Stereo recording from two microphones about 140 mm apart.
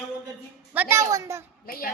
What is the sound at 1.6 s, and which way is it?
Speech, 90° left.